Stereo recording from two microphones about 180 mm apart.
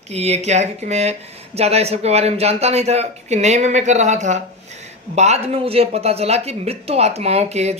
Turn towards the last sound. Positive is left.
turn(degrees=-35)  # may be behind; listen again after turning